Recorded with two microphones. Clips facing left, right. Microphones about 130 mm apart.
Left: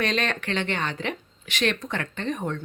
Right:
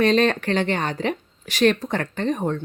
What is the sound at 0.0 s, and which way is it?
Speech, 35° right (ahead or behind).